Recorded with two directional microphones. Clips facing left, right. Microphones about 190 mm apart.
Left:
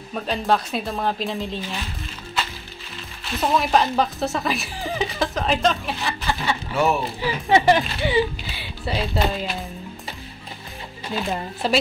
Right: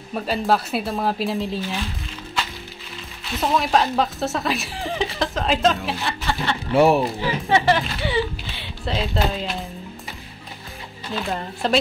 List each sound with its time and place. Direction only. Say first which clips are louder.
0.1 s speech: right 1 dB; 5° right (ahead or behind)
3.3 s speech: even; centre (ahead or behind)
6.7 s speech: right 6 dB; 30° right (ahead or behind)
7.4 s speech: left 3 dB; 15° left (ahead or behind)
8.5 s speech: even; centre (ahead or behind)
11.1 s speech: left 1 dB; 15° left (ahead or behind)
11.6 s speech: right 1 dB; 5° left (ahead or behind)